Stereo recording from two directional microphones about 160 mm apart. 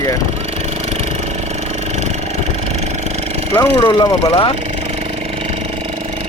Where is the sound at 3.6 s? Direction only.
25° left (ahead or behind).